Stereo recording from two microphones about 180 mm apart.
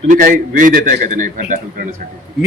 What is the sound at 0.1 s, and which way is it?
A man's voice, 50° right (ahead or behind).